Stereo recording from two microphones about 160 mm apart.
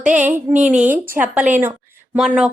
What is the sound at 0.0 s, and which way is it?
A woman's voice, 10° right (ahead or behind).